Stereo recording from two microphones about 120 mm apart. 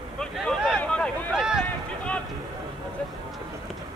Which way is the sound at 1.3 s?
5° right (ahead or behind).